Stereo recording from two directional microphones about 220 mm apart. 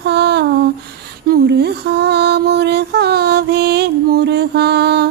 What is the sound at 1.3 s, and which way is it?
Music, 50° right (ahead or behind).